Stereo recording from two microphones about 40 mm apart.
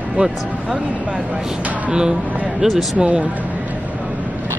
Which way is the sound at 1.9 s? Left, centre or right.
Right.